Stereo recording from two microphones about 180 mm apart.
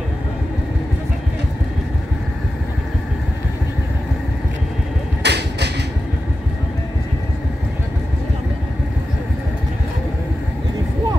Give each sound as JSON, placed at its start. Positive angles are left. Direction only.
{"t": 5.2, "sound": "vehicle", "side_deg": -70}